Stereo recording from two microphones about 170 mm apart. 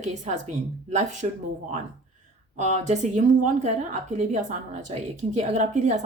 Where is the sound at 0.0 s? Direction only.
45° right (ahead or behind).